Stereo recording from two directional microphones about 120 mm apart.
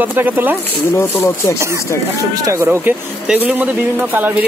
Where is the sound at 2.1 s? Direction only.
30° right (ahead or behind).